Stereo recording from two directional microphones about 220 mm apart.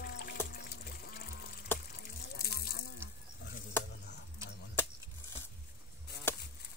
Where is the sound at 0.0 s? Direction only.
40° left (ahead or behind).